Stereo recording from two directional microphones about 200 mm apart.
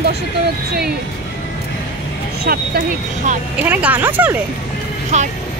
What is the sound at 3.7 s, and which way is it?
Speech, 10° right (ahead or behind).